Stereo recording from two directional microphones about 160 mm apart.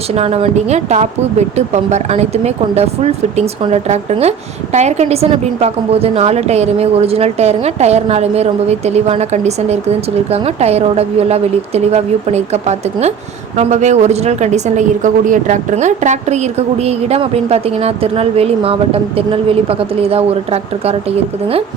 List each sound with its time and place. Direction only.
0.1 s speech: 40° right (ahead or behind)